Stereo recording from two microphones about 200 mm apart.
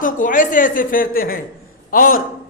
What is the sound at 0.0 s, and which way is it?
A man's voice, 40° left (ahead or behind).